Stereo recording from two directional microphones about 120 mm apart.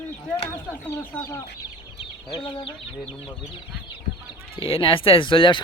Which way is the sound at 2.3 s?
45° left (ahead or behind).